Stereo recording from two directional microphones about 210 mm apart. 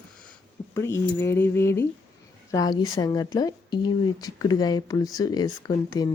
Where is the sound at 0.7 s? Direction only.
10° left (ahead or behind).